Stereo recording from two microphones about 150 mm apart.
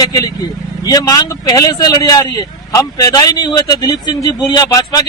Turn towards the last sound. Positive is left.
turn(degrees=25)  # may be behind; listen again after turning